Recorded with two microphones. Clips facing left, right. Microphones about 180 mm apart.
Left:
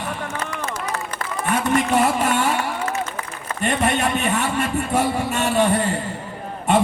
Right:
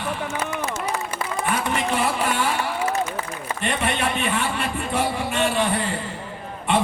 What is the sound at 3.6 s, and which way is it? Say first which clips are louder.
A man's voice: left 4 dB; 40° left (ahead or behind).